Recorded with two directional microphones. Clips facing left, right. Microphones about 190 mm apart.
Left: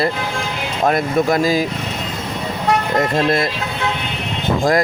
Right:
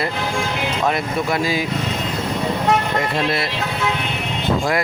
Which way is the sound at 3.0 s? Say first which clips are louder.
Left 4 dB; 45° left (ahead or behind).